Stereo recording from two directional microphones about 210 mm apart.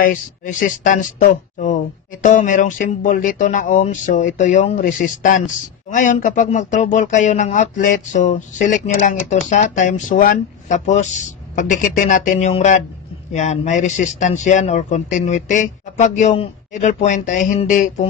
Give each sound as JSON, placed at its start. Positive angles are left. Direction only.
{"t": 0.0, "sound": "speech", "side_deg": 40}